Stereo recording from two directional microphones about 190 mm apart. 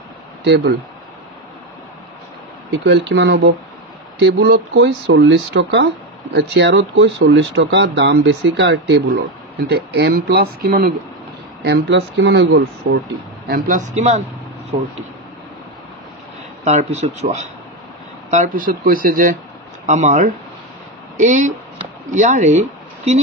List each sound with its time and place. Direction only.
0.4 s speech: 60° right (ahead or behind)
2.8 s speech: 70° right (ahead or behind); by 10.9 s 55° right (ahead or behind)
11.6 s speech: 65° right (ahead or behind)
13.5 s speech: 45° right (ahead or behind)
16.6 s speech: 35° right (ahead or behind)